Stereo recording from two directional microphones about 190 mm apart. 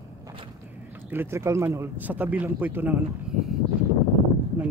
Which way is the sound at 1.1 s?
10° right (ahead or behind).